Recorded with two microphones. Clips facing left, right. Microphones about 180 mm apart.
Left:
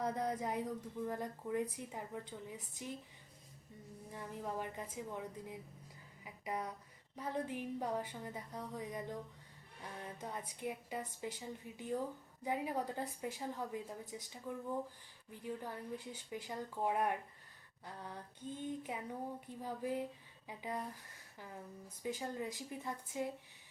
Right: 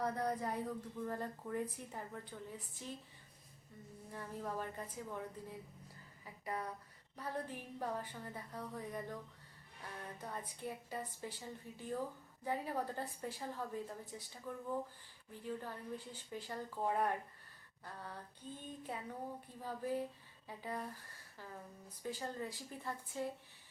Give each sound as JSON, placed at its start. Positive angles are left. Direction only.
{"t": 0.0, "sound": "a woman's voice", "side_deg": 20}
{"t": 4.1, "sound": "a woman's voice", "side_deg": 15}
{"t": 10.2, "sound": "a woman's voice", "side_deg": 15}
{"t": 22.0, "sound": "a woman's voice", "side_deg": 15}